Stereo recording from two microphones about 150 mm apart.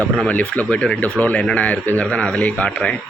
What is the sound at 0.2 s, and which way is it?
Speech, 10° left (ahead or behind).